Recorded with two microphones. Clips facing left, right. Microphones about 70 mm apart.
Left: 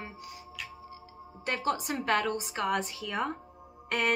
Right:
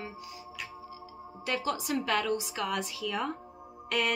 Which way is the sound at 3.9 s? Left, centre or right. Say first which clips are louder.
Left 1 dB; left.